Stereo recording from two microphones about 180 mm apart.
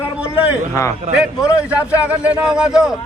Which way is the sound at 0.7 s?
15° left (ahead or behind).